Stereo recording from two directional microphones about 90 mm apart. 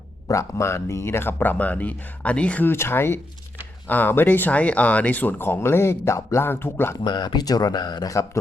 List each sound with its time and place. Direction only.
0.3 s speech: 35° left (ahead or behind)
6.9 s speech: 50° left (ahead or behind)
8.1 s a man's voice: 35° left (ahead or behind)